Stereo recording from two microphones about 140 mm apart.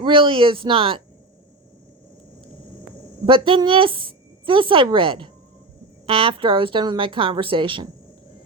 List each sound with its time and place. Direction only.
0.0 s a woman's voice: 40° right (ahead or behind)
3.2 s a woman's voice: 40° right (ahead or behind)